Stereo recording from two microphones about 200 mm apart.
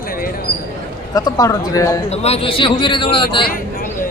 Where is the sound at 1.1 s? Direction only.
20° left (ahead or behind).